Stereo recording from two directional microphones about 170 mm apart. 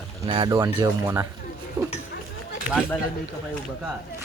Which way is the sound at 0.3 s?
30° right (ahead or behind).